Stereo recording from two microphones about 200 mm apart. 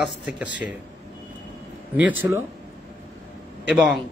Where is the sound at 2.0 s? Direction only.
10° right (ahead or behind).